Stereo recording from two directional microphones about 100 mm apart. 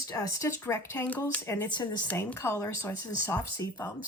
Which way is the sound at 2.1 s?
25° left (ahead or behind).